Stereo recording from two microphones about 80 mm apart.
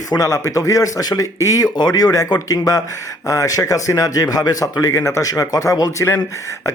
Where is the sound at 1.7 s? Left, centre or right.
Left.